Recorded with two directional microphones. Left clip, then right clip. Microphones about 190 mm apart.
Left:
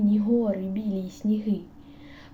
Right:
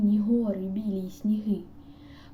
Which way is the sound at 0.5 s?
10° right (ahead or behind).